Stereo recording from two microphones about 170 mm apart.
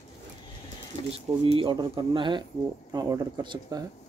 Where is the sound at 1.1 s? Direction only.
30° right (ahead or behind).